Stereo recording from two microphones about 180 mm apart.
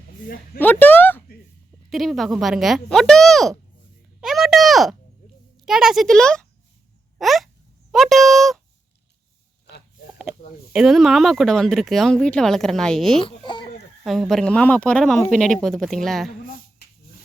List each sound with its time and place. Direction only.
0.6 s speech: 10° left (ahead or behind)
1.9 s speech: centre (ahead or behind)
4.2 s a sound: centre (ahead or behind)
5.6 s speech: 5° right (ahead or behind)
7.2 s a sound: centre (ahead or behind)
10.7 s speech: centre (ahead or behind)
13.2 s speech: 25° left (ahead or behind)
14.0 s speech: centre (ahead or behind)